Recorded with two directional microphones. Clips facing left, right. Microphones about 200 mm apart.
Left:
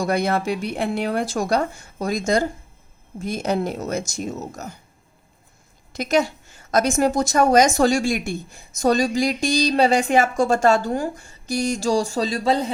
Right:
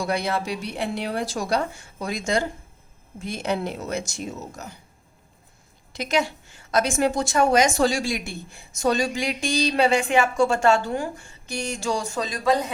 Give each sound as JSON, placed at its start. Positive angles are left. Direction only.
{"t": 0.0, "sound": "speech", "side_deg": 45}
{"t": 5.9, "sound": "a woman's voice", "side_deg": 45}